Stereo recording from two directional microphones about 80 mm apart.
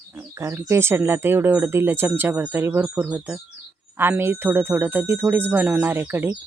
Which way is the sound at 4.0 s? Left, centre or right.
Right.